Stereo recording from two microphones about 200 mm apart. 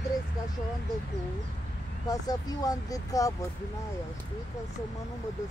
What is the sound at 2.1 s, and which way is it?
Speech, 20° left (ahead or behind).